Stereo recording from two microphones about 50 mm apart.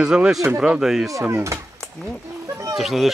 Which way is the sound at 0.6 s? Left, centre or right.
Centre.